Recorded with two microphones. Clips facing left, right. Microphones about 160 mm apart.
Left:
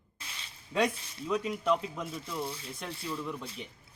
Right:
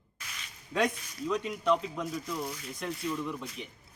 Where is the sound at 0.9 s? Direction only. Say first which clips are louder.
Right 5 dB; 30° left (ahead or behind).